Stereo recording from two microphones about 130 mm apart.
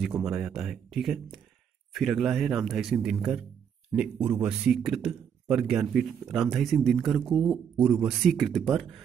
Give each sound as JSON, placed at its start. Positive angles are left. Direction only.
{"t": 0.0, "sound": "speech", "side_deg": -5}